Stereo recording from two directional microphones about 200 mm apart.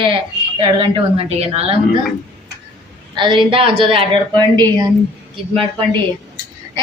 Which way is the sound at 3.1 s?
25° right (ahead or behind).